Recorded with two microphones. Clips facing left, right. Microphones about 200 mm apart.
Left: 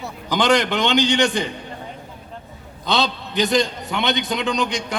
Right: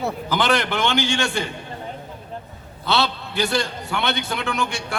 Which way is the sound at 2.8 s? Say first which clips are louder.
Left 1 dB; 15° left (ahead or behind).